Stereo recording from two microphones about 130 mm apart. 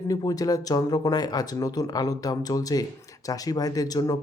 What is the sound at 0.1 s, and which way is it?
Speech, 30° left (ahead or behind).